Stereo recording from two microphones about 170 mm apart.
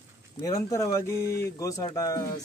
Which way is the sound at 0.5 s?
15° left (ahead or behind).